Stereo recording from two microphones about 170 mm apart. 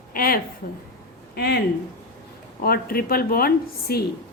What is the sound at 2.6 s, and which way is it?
A woman's voice, 60° left (ahead or behind).